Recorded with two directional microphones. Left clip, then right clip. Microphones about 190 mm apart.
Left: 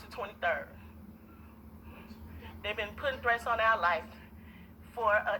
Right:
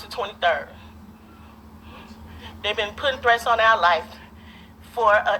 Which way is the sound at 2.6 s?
40° right (ahead or behind).